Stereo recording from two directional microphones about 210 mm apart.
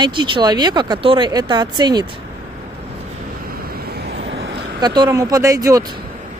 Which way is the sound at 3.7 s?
50° right (ahead or behind).